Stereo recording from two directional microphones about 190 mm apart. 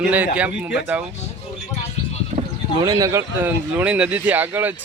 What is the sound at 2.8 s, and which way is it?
Speech, 20° right (ahead or behind).